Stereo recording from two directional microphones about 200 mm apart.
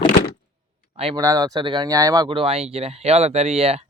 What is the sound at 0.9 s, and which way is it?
Speech, 25° right (ahead or behind).